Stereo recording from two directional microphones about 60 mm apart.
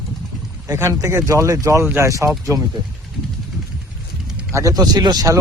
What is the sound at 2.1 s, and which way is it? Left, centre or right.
Speech, right.